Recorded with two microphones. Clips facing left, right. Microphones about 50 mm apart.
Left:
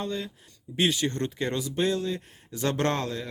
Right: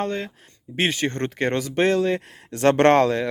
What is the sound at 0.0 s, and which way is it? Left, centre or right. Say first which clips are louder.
Speech: right 6 dB; right.